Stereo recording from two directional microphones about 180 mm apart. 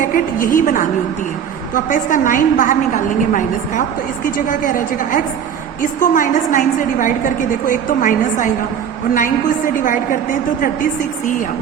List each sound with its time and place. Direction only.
0.0 s a woman's voice: 50° left (ahead or behind)
9.8 s a woman's voice: 50° left (ahead or behind)